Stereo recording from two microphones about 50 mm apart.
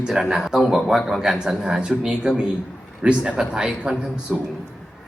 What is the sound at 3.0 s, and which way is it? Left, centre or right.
Music, right.